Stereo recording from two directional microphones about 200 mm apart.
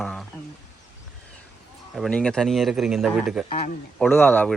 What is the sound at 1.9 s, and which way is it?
Speech, 5° left (ahead or behind).